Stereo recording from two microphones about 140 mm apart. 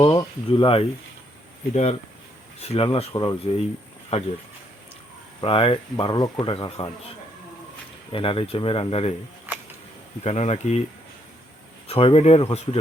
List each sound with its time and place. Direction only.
0.1 s speech: 25° left (ahead or behind)
0.6 s speech: 40° left (ahead or behind)
1.7 s speech: 50° left (ahead or behind)
5.4 s speech: 40° left (ahead or behind)
8.1 s speech: 40° left (ahead or behind)
10.2 s speech: 45° left (ahead or behind)
11.9 s speech: 45° left (ahead or behind)